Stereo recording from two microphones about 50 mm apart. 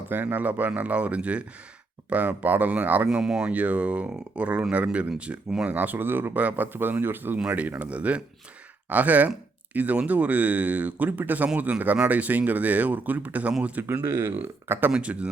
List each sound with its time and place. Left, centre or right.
0.1 s speech: right
3.1 s speech: centre
3.5 s speech: right
5.7 s speech: right
7.8 s speech: right
14.1 s speech: right
14.7 s speech: right
14.9 s speech: right